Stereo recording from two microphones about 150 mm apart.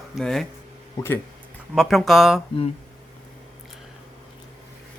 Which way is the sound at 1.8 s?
Centre (ahead or behind).